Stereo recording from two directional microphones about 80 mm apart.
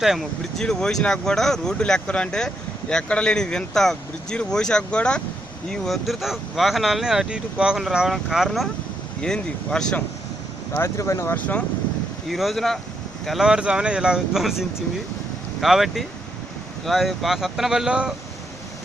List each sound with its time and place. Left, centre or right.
0.0 s speech: centre
0.6 s speech: centre
10.8 s speech: left
11.3 s speech: centre
12.3 s speech: centre
15.6 s speech: centre